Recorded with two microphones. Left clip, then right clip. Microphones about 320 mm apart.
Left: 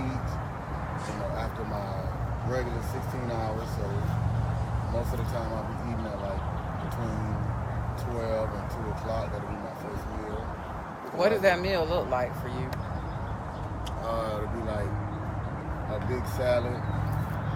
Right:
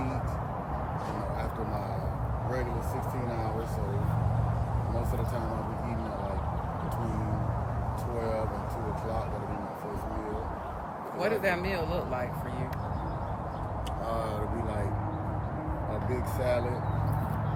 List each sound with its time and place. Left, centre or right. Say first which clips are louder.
11.2 s speech: left 5 dB; centre
14.1 s speech: left 3 dB; centre
16.4 s speech: left 3 dB; centre